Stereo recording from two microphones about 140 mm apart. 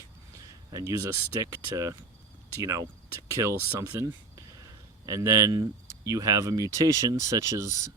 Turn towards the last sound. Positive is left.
turn(degrees=-25)  # may be behind; listen again after turning